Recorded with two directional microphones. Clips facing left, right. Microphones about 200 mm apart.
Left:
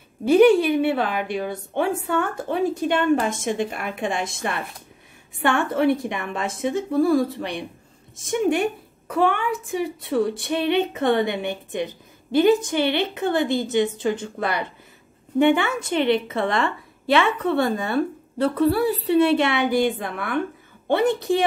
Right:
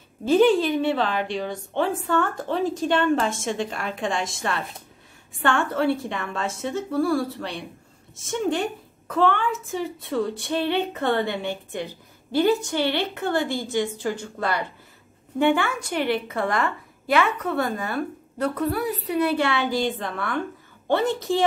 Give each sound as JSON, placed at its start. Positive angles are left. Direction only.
{"t": 0.2, "sound": "a woman's voice", "side_deg": 15}